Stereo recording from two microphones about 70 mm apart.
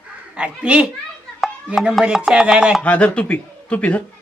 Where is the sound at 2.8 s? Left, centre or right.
Left.